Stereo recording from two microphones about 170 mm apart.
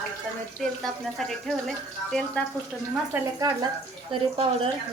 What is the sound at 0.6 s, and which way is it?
Speech, centre (ahead or behind).